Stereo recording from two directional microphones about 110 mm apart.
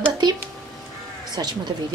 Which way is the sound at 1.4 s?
40° right (ahead or behind).